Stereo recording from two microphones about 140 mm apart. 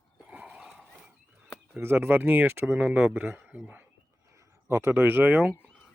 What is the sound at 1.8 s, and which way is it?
Speech, 15° right (ahead or behind).